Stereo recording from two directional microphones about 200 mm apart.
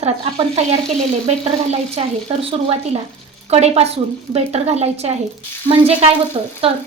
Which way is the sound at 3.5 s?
30° right (ahead or behind).